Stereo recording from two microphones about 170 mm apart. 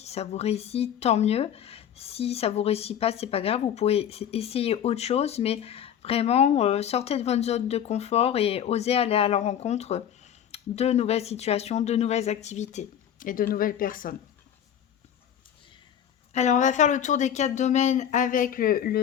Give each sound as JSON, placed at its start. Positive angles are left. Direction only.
{"t": 0.0, "sound": "speech", "side_deg": 40}
{"t": 16.3, "sound": "speech", "side_deg": 45}